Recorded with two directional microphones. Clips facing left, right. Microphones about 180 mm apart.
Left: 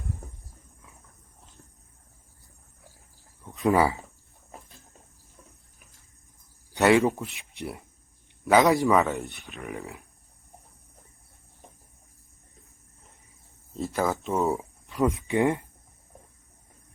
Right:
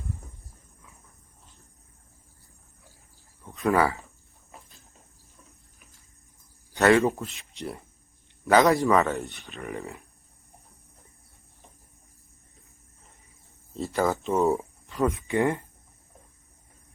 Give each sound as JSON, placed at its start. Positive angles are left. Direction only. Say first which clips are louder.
{"t": 3.5, "sound": "speech", "louder": "left 1 dB", "side_deg": 20}
{"t": 6.7, "sound": "a man's voice", "louder": "even", "side_deg": 15}
{"t": 13.7, "sound": "speech", "louder": "right 1 dB", "side_deg": 0}
{"t": 14.9, "sound": "speech", "louder": "left 1 dB", "side_deg": 15}